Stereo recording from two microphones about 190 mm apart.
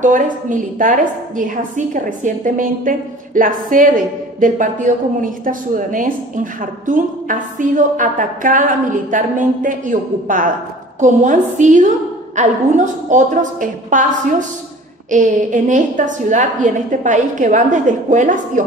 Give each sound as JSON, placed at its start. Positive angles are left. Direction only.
{"t": 0.0, "sound": "a woman's voice", "side_deg": -45}
{"t": 15.0, "sound": "a woman's voice", "side_deg": -40}